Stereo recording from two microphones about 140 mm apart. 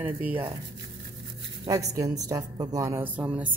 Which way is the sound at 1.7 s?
25° right (ahead or behind).